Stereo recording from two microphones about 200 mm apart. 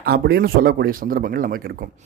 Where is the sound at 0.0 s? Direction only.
50° right (ahead or behind).